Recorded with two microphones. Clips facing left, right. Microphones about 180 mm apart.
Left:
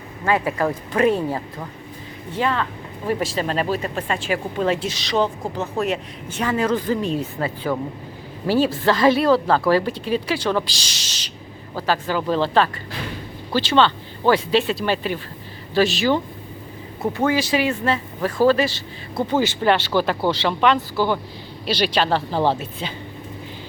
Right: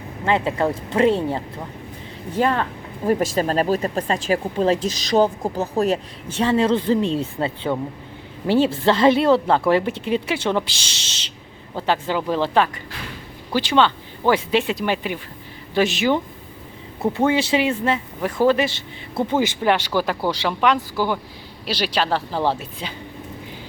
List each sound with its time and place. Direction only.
0.3 s speech: 25° right (ahead or behind)
2.3 s speech: 40° right (ahead or behind); by 22.6 s centre (ahead or behind)